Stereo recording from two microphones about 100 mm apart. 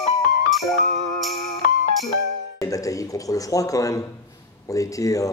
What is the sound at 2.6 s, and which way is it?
Speech, 35° left (ahead or behind).